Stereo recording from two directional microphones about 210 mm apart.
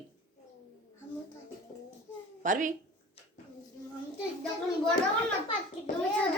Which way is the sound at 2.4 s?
40° right (ahead or behind).